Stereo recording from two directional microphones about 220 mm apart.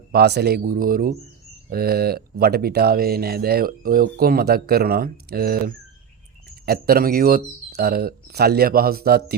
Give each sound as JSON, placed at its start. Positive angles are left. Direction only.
{"t": 0.1, "sound": "speech", "side_deg": -45}